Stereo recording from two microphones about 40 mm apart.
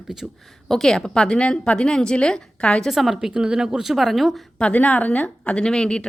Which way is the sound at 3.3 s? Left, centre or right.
Centre.